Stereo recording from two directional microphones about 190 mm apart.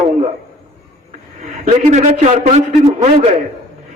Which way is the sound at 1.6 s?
40° right (ahead or behind).